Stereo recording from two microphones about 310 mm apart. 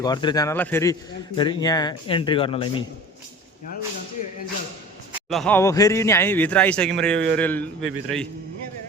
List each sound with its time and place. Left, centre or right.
0.0 s speech: centre
5.3 s speech: centre